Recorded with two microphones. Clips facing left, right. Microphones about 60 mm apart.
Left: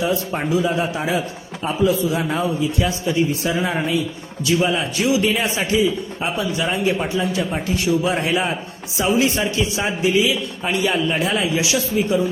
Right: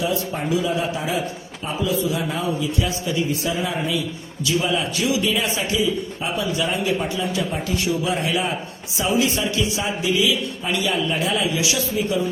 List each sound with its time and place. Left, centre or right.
0.0 s a man's voice: left